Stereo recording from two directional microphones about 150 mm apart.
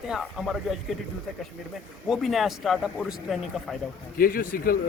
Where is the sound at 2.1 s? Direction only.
Centre (ahead or behind).